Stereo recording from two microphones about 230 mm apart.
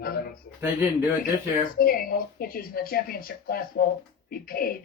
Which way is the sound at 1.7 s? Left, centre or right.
Left.